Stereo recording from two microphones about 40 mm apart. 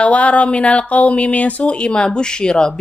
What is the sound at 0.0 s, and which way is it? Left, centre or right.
Speech, left.